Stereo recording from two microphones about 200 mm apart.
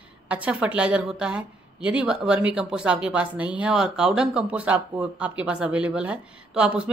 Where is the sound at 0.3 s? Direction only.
5° right (ahead or behind).